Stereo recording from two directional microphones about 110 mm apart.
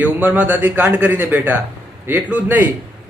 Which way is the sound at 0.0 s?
15° right (ahead or behind).